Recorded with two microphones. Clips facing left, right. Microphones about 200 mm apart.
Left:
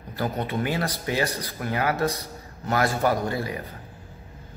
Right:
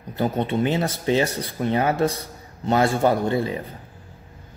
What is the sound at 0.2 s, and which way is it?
Speech, 25° right (ahead or behind).